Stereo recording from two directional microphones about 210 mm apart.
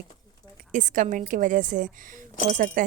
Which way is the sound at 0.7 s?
35° right (ahead or behind).